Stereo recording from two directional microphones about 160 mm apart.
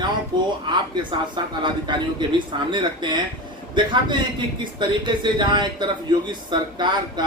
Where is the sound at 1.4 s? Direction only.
30° right (ahead or behind).